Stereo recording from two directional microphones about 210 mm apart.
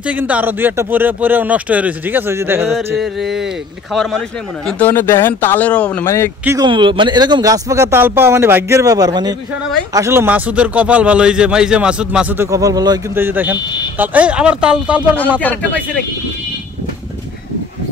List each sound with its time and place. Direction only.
0.0 s a man's voice: 5° right (ahead or behind)
3.0 s speech: centre (ahead or behind)
6.4 s a man's voice: 15° right (ahead or behind)
15.4 s speech: 5° left (ahead or behind)